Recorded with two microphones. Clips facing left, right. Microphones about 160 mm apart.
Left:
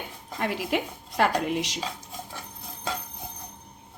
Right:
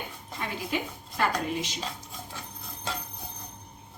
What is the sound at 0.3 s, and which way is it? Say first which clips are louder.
A woman's voice: left 5 dB; 70° left (ahead or behind).